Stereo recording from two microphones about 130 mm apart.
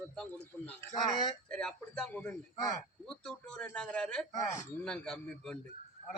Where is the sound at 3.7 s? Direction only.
5° left (ahead or behind).